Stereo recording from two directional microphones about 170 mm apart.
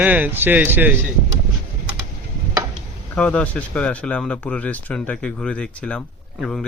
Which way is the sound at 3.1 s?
5° left (ahead or behind).